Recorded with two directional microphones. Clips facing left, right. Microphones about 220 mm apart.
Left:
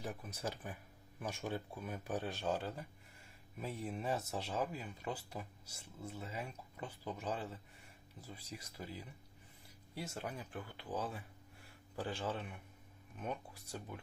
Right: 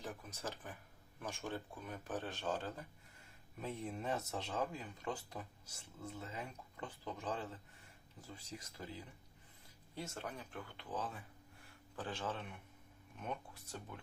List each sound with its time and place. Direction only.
0.0 s speech: 10° left (ahead or behind)